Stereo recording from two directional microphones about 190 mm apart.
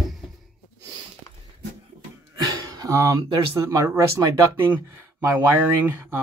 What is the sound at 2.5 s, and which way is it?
Speech, 20° right (ahead or behind).